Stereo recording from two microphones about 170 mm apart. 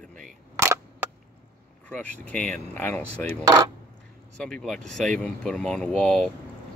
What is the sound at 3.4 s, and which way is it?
Speech, 20° right (ahead or behind).